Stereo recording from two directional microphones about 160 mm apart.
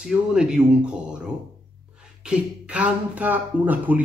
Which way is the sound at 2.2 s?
10° right (ahead or behind).